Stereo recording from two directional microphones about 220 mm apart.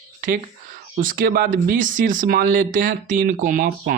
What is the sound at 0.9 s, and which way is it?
Speech, 40° right (ahead or behind).